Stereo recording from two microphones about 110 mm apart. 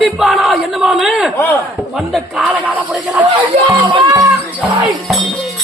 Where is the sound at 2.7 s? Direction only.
15° right (ahead or behind).